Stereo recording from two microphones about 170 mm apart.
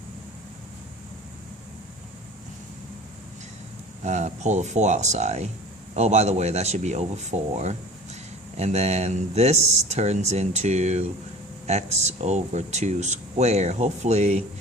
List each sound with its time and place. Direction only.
4.0 s speech: 45° right (ahead or behind)